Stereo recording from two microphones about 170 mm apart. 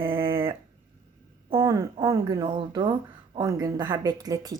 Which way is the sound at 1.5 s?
30° right (ahead or behind).